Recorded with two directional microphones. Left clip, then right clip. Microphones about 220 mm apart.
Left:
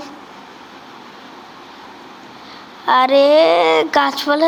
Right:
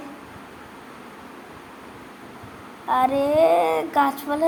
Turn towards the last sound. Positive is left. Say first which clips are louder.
# left 6 dB
turn(degrees=15)  # may be behind; listen again after turning